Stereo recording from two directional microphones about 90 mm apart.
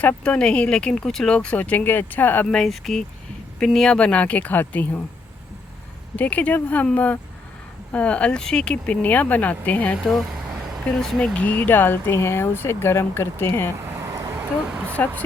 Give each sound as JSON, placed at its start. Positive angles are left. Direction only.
{"t": 0.0, "sound": "speech", "side_deg": 15}
{"t": 2.5, "sound": "speech", "side_deg": 5}
{"t": 6.1, "sound": "speech", "side_deg": 15}
{"t": 10.1, "sound": "speech", "side_deg": 0}
{"t": 11.3, "sound": "speech", "side_deg": 20}
{"t": 13.7, "sound": "vehicle", "side_deg": -30}
{"t": 14.1, "sound": "a sound", "side_deg": -35}
{"t": 14.9, "sound": "speech", "side_deg": 20}